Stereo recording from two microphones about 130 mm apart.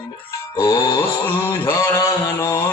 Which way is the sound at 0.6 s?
30° left (ahead or behind).